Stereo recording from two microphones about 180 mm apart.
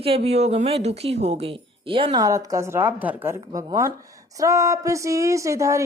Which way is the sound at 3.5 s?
20° right (ahead or behind).